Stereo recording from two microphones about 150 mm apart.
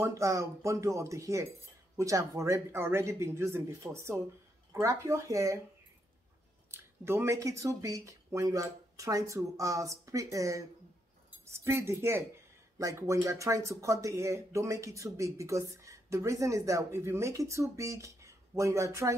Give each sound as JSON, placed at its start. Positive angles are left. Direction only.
{"t": 0.0, "sound": "speech", "side_deg": -20}
{"t": 6.7, "sound": "speech", "side_deg": -15}